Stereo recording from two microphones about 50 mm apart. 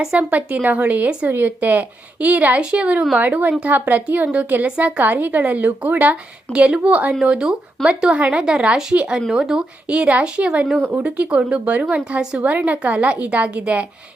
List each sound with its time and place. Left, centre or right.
0.1 s a woman's voice: right
3.2 s a woman's voice: right
6.5 s speech: right
9.8 s speech: right